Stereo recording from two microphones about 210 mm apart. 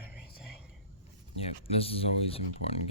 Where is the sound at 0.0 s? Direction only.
10° right (ahead or behind).